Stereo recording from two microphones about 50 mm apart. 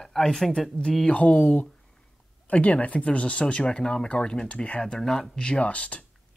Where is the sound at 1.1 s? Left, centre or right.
Left.